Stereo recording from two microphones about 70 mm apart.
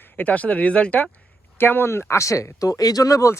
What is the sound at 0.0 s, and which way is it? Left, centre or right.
Speech, left.